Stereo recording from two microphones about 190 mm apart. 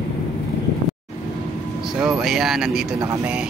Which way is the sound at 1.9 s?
Centre (ahead or behind).